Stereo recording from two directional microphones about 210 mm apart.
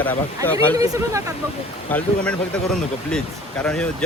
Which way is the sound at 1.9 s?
5° left (ahead or behind).